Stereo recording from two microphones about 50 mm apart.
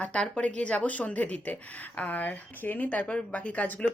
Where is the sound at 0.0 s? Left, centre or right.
Left.